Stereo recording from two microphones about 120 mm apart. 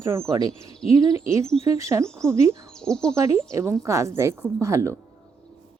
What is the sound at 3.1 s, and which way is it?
Speech, 25° right (ahead or behind).